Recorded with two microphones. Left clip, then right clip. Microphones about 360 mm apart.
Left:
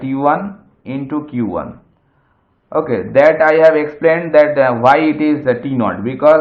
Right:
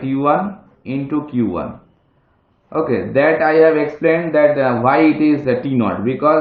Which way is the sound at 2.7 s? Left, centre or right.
Left.